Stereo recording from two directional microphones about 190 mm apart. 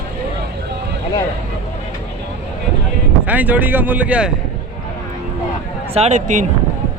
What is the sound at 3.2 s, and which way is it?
Speech, 10° right (ahead or behind).